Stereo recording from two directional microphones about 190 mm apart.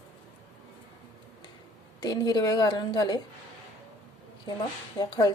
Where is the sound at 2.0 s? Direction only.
20° left (ahead or behind).